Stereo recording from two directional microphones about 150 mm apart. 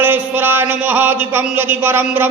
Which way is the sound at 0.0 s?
10° right (ahead or behind).